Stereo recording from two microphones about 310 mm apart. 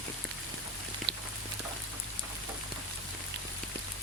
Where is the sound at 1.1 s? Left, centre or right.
Right.